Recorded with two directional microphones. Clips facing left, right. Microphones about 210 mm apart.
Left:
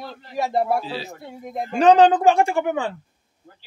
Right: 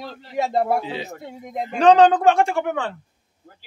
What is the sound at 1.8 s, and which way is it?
A woman's voice, 5° left (ahead or behind).